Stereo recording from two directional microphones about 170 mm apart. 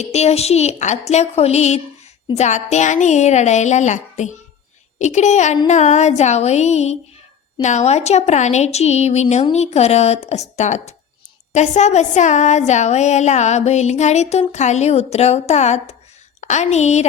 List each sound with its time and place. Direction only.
0.0 s speech: 40° left (ahead or behind)